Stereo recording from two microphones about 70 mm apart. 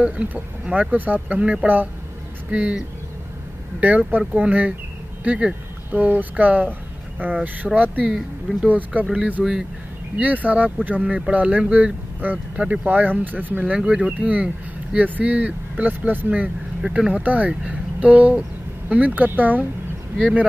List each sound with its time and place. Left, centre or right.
0.0 s speech: right
3.8 s speech: right
9.1 s speech: centre
10.1 s speech: right